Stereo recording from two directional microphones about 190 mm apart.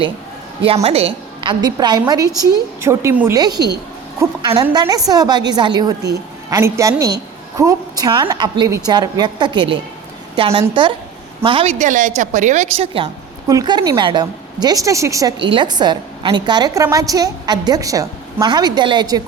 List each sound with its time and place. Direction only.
0.6 s a woman's voice: 30° right (ahead or behind)